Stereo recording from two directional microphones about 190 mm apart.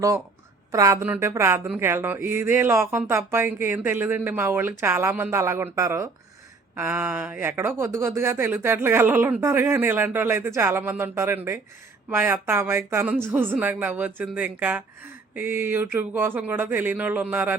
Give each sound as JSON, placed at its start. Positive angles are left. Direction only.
{"t": 0.7, "sound": "speech", "side_deg": -15}